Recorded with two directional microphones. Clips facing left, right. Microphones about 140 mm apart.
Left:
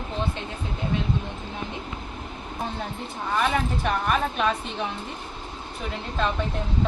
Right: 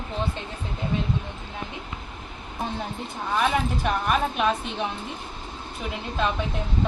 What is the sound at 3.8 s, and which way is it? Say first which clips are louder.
Speech: even; 10° right (ahead or behind).